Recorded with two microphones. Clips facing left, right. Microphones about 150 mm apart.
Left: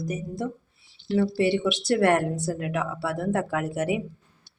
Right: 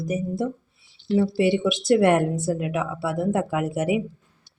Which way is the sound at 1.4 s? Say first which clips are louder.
Right 2 dB; 15° right (ahead or behind).